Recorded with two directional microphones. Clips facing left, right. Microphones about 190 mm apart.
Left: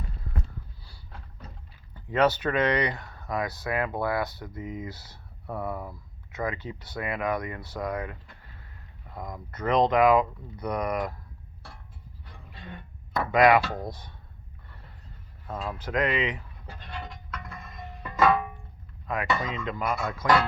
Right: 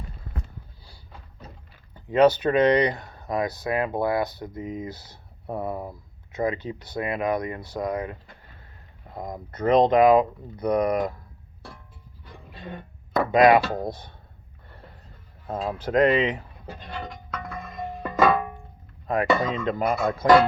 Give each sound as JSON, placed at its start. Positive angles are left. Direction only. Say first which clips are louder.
{"t": 2.0, "sound": "speech", "louder": "right 6 dB", "side_deg": -15}
{"t": 9.1, "sound": "speech", "louder": "right 4 dB", "side_deg": -25}
{"t": 13.1, "sound": "speech", "louder": "right 3 dB", "side_deg": -20}
{"t": 15.4, "sound": "speech", "louder": "right 6 dB", "side_deg": -30}
{"t": 19.0, "sound": "speech", "louder": "right 7 dB", "side_deg": -35}